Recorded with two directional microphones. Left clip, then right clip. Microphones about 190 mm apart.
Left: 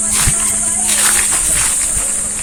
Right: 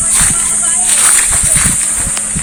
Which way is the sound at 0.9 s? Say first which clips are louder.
Right 2 dB; 25° right (ahead or behind).